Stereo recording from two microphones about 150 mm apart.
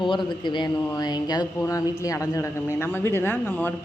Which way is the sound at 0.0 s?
30° left (ahead or behind).